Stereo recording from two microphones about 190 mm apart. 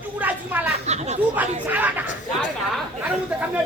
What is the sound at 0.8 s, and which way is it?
Speech, 35° right (ahead or behind).